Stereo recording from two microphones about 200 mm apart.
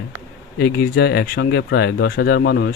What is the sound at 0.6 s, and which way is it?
Speech, 55° left (ahead or behind).